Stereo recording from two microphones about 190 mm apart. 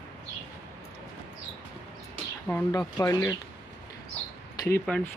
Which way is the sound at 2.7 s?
20° left (ahead or behind).